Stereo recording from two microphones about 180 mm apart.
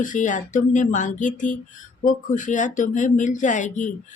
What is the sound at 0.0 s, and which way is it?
Speech, 45° left (ahead or behind).